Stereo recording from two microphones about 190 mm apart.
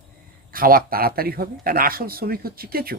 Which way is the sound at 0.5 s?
50° right (ahead or behind).